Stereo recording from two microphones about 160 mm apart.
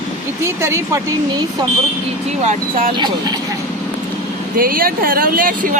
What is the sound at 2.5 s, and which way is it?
Speech, 60° right (ahead or behind).